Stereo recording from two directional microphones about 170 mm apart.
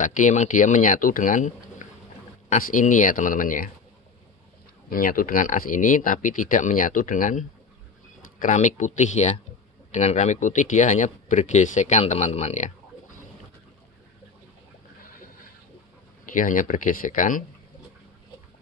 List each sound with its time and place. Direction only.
0.0 s speech: 45° left (ahead or behind)
4.8 s speech: 55° left (ahead or behind)
16.3 s speech: 50° left (ahead or behind)